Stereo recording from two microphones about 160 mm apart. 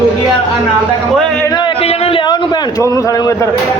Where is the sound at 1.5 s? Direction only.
30° left (ahead or behind).